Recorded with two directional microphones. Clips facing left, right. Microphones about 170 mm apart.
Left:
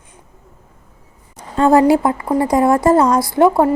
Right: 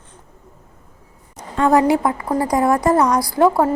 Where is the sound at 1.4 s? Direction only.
30° left (ahead or behind).